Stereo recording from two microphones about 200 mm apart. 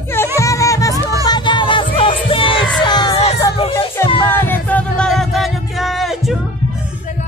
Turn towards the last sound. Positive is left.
turn(degrees=0)  # may be behind; listen again after turning